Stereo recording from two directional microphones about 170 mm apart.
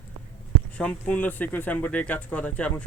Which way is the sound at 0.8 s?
5° left (ahead or behind).